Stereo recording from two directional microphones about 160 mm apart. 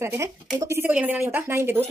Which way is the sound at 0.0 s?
15° right (ahead or behind).